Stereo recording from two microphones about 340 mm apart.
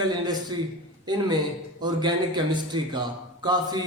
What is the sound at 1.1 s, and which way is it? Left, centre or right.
Speech, centre.